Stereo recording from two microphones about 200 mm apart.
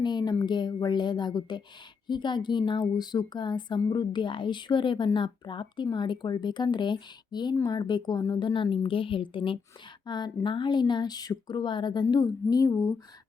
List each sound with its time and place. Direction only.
0.0 s a woman's voice: 20° left (ahead or behind)